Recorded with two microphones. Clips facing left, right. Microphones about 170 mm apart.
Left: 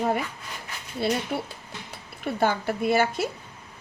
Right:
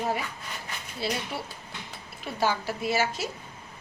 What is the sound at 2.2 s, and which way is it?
A woman's voice, 55° left (ahead or behind).